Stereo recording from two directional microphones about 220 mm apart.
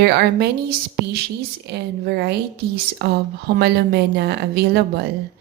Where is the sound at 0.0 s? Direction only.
45° right (ahead or behind).